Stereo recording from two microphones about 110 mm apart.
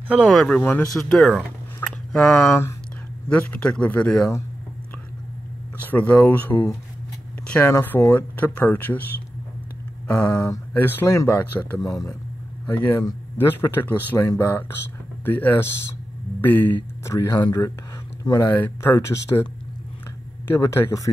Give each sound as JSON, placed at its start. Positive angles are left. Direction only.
{"t": 0.3, "sound": "speech", "side_deg": 0}
{"t": 0.6, "sound": "speech", "side_deg": 15}
{"t": 0.9, "sound": "speech", "side_deg": 5}
{"t": 2.4, "sound": "speech", "side_deg": 25}
{"t": 3.3, "sound": "speech", "side_deg": 15}
{"t": 5.9, "sound": "speech", "side_deg": 15}
{"t": 10.1, "sound": "speech", "side_deg": 10}
{"t": 11.8, "sound": "speech", "side_deg": 30}
{"t": 17.1, "sound": "speech", "side_deg": 35}
{"t": 18.3, "sound": "speech", "side_deg": 20}
{"t": 20.4, "sound": "speech", "side_deg": 25}